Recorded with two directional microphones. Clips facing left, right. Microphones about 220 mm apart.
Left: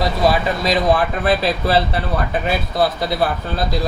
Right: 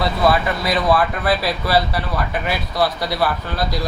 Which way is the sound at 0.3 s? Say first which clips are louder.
Left 1 dB; 20° left (ahead or behind).